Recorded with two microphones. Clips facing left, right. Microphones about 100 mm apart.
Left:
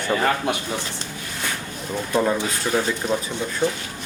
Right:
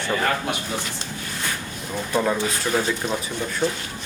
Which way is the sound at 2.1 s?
5° left (ahead or behind).